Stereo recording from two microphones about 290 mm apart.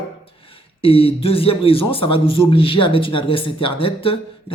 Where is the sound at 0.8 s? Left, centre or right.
Centre.